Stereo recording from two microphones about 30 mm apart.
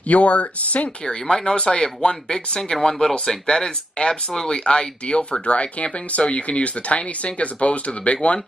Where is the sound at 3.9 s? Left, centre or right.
Left.